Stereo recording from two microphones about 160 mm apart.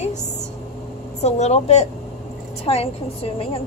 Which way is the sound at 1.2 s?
45° left (ahead or behind).